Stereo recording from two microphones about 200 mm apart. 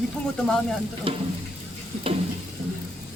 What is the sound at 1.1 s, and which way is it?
Frying, 25° right (ahead or behind).